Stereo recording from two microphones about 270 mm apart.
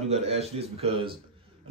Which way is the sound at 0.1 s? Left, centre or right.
Right.